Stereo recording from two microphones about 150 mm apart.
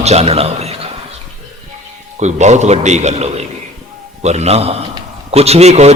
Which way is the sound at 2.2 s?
50° right (ahead or behind).